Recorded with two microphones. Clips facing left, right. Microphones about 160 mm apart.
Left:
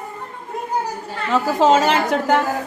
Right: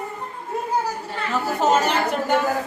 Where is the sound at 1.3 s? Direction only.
90° left.